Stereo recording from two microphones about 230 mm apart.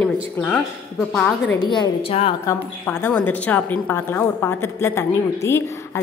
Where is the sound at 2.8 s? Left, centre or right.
Centre.